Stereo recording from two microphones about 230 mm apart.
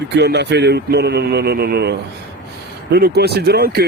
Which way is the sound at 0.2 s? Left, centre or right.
Right.